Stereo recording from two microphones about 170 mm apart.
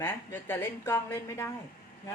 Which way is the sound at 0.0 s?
15° left (ahead or behind).